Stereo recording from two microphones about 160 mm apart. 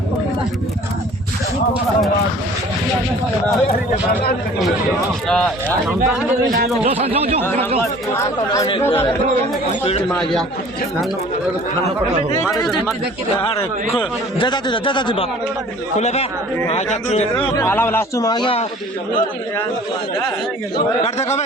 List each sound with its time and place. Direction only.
5.3 s speech: 5° left (ahead or behind)
7.0 s speech: 40° right (ahead or behind)
14.3 s a man's voice: 30° left (ahead or behind)
16.0 s speech: 45° left (ahead or behind)
17.6 s a man's voice: 15° left (ahead or behind); by 18.6 s 30° left (ahead or behind)
20.7 s speech: 40° left (ahead or behind)